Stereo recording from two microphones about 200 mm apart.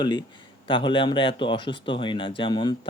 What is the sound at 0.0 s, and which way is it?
Speech, 20° left (ahead or behind).